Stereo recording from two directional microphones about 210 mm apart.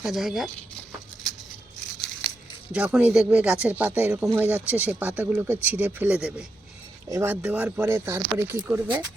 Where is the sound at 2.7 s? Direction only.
5° right (ahead or behind).